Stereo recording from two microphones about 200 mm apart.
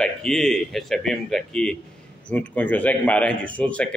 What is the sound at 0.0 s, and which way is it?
A man's voice, 5° left (ahead or behind).